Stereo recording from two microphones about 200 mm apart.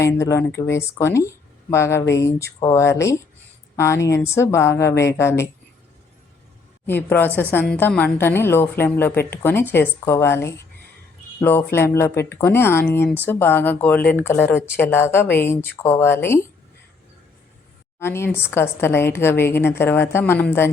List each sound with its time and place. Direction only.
0.0 s speech: 15° left (ahead or behind)
6.8 s speech: 10° left (ahead or behind)
18.0 s speech: 10° left (ahead or behind)